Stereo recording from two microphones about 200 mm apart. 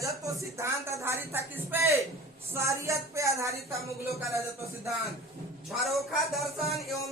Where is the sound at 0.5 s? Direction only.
15° right (ahead or behind).